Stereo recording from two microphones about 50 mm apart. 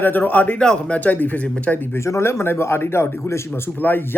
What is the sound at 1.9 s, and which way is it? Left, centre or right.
Speech, left.